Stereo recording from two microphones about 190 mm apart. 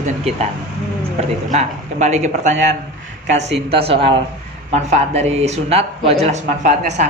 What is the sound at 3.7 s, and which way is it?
Speech, 30° right (ahead or behind).